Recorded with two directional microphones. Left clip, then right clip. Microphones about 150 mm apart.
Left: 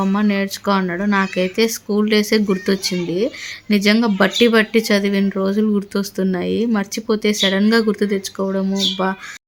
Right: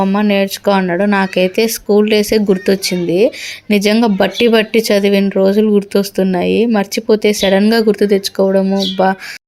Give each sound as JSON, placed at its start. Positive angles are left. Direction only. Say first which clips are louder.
{"t": 0.0, "sound": "speech", "louder": "right 6 dB", "side_deg": -20}